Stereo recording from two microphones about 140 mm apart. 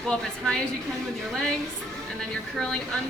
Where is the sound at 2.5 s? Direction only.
5° left (ahead or behind).